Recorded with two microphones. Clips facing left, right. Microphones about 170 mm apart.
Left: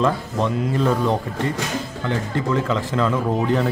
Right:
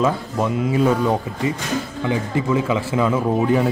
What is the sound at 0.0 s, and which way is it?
A man's voice, 5° right (ahead or behind).